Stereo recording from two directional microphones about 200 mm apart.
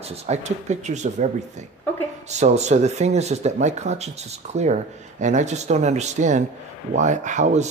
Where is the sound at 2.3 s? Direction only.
35° right (ahead or behind).